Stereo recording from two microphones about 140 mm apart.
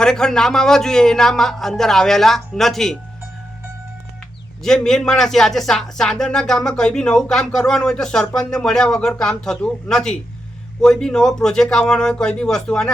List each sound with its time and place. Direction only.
0.0 s speech: 5° left (ahead or behind)
4.6 s speech: 5° left (ahead or behind)